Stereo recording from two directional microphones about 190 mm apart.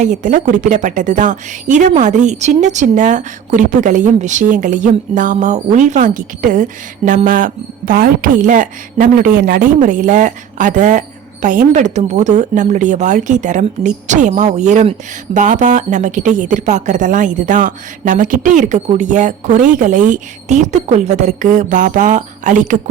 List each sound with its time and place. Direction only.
0.0 s a woman's voice: 40° right (ahead or behind)